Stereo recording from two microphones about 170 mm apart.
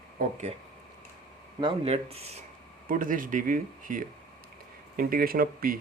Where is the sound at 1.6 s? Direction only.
30° right (ahead or behind).